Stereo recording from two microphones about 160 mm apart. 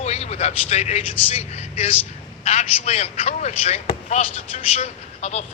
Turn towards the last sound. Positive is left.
turn(degrees=45)  # may be behind; listen again after turning